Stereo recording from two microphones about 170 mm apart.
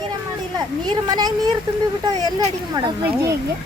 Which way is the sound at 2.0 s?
20° right (ahead or behind).